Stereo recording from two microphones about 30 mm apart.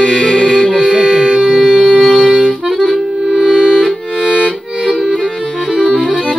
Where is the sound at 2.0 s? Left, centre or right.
Centre.